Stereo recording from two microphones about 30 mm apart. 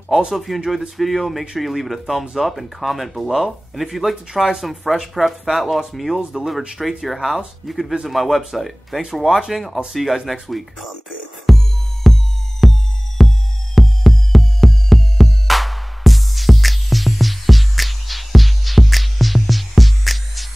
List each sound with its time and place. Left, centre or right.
0.7 s speech: centre
6.8 s speech: centre
10.5 s music: centre